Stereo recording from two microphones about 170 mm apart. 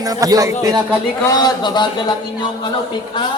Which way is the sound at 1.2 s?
25° left (ahead or behind).